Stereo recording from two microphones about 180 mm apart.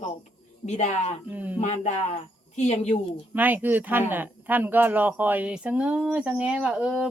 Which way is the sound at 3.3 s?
10° right (ahead or behind).